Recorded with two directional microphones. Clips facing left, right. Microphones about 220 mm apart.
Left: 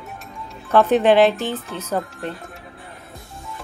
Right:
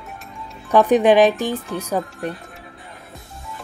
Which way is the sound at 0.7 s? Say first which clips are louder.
Right 1 dB; 15° right (ahead or behind).